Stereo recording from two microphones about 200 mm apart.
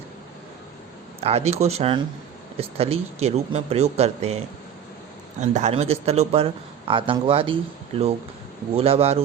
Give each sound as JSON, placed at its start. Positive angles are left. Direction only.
{"t": 1.2, "sound": "speech", "side_deg": -30}
{"t": 5.4, "sound": "a man's voice", "side_deg": -35}
{"t": 8.7, "sound": "a man's voice", "side_deg": -30}